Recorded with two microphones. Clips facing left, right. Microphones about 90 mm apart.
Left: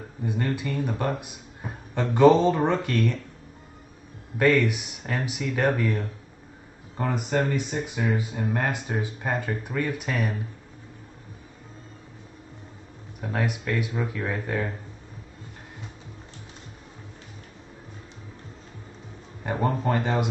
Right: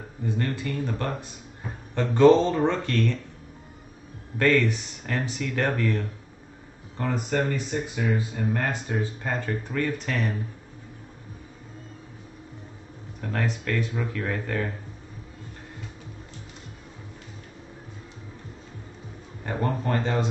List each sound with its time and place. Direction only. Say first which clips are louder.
0.2 s speech: left 1 dB; 15° left (ahead or behind)
4.4 s speech: left 1 dB; 15° left (ahead or behind)
13.2 s speech: left 1 dB; 10° left (ahead or behind)
19.4 s speech: left 2 dB; 20° left (ahead or behind)